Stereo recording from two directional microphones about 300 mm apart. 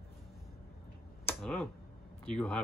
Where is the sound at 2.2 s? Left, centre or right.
Centre.